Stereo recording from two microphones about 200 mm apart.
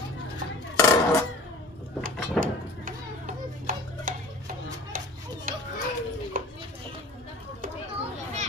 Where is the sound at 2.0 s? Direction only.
40° right (ahead or behind).